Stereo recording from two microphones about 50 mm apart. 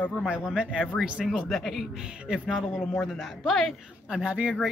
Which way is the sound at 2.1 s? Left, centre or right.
Right.